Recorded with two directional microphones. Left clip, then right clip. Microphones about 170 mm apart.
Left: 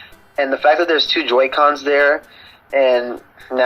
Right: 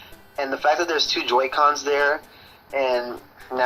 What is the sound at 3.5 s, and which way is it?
Speech, 40° left (ahead or behind).